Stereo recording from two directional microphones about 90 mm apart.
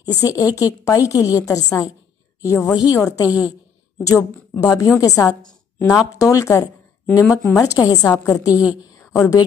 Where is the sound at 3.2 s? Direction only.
15° right (ahead or behind).